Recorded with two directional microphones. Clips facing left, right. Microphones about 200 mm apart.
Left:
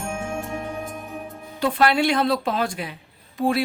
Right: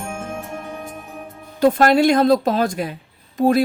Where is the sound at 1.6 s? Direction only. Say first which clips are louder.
Right 6 dB; 40° right (ahead or behind).